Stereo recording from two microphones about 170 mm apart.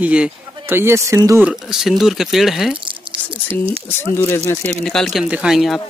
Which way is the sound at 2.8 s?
30° right (ahead or behind).